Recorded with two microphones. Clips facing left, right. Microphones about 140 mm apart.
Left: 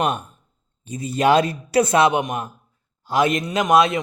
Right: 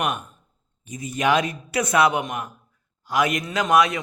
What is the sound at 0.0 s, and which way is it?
Speech, 30° left (ahead or behind).